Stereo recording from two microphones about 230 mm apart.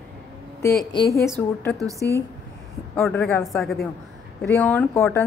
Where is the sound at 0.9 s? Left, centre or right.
Centre.